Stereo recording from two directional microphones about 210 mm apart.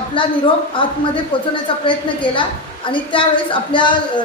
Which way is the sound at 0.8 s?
25° left (ahead or behind).